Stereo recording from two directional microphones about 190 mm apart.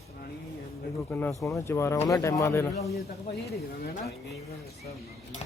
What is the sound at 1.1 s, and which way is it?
Speech, 10° left (ahead or behind).